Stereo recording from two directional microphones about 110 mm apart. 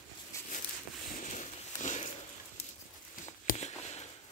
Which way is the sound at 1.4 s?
90° left.